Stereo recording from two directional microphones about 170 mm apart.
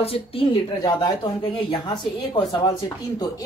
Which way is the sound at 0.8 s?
25° left (ahead or behind).